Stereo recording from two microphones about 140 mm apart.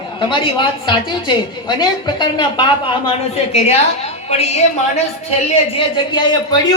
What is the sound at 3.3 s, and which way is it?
A woman's voice, 50° left (ahead or behind).